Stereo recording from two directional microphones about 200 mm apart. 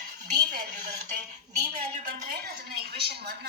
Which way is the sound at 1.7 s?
35° right (ahead or behind).